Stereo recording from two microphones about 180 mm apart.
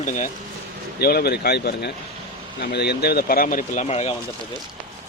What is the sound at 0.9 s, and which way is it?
Speech, 60° left (ahead or behind).